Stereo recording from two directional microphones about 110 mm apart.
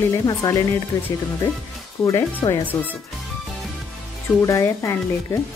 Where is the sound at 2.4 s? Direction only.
40° left (ahead or behind).